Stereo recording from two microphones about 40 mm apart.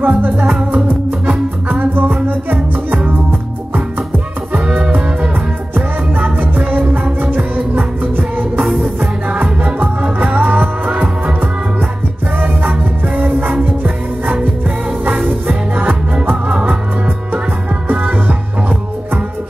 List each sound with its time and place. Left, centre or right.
0.0 s music: right
1.7 s music: right
5.8 s music: right
6.7 s music: right
12.4 s music: right
15.7 s music: right
17.8 s music: right